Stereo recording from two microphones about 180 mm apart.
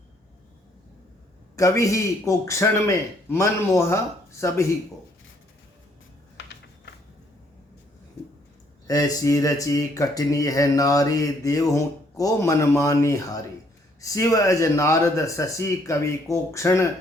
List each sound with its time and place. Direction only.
1.5 s speech: 15° left (ahead or behind)
6.3 s a sound: 75° left (ahead or behind)
8.9 s speech: 20° left (ahead or behind)